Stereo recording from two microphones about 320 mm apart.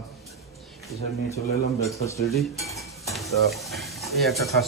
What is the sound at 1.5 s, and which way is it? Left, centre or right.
Speech, left.